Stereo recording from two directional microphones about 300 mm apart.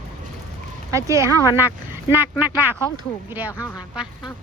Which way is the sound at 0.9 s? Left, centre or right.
Centre.